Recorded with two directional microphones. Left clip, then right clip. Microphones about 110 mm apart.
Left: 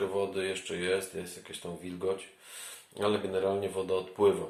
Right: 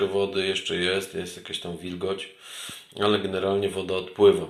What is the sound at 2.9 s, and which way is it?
Speech, 15° left (ahead or behind).